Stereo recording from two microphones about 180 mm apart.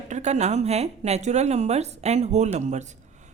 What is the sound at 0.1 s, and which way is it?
A woman's voice, 40° right (ahead or behind).